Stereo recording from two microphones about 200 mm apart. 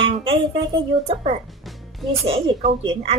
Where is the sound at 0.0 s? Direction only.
25° right (ahead or behind).